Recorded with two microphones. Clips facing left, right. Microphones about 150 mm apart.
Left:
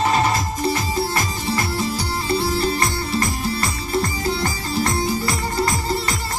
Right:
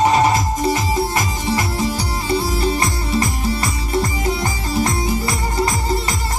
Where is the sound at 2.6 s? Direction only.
25° right (ahead or behind).